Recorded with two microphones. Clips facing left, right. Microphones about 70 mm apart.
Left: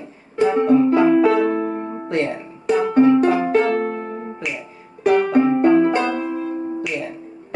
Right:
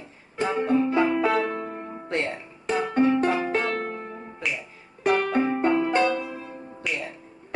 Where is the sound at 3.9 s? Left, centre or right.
Left.